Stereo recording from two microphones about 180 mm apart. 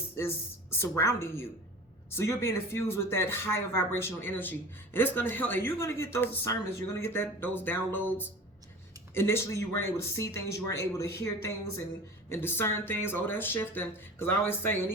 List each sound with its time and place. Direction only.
0.2 s speech: 15° left (ahead or behind)
12.3 s speech: 10° left (ahead or behind)